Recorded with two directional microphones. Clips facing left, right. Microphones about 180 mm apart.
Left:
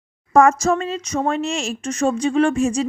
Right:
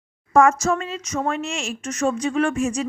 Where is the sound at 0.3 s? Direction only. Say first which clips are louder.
Left 2 dB; 35° left (ahead or behind).